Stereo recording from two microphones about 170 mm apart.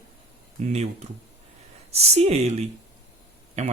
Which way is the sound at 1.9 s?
40° right (ahead or behind).